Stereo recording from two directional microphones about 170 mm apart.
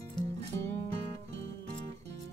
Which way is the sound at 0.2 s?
25° left (ahead or behind).